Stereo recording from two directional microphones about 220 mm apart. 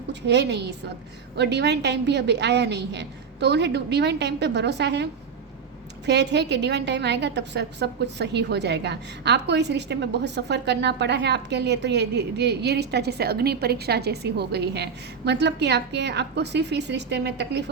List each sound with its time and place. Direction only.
0.1 s a woman's voice: 50° right (ahead or behind)
6.1 s a woman's voice: 50° right (ahead or behind)